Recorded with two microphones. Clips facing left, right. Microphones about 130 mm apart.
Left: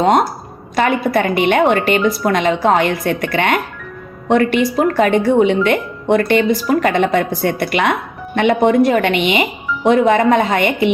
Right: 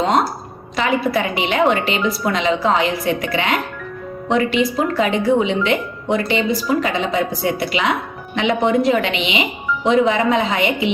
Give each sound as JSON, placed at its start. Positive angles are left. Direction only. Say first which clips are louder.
{"t": 0.0, "sound": "speech", "louder": "left 4 dB", "side_deg": 55}